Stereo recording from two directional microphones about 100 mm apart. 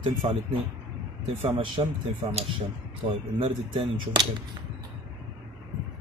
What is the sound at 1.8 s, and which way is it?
Speech, 75° right (ahead or behind).